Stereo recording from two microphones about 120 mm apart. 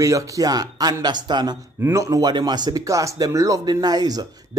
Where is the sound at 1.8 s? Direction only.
25° right (ahead or behind).